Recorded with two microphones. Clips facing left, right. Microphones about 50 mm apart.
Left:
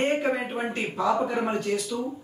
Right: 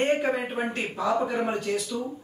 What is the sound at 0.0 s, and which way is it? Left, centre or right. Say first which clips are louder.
A man's voice: even; centre.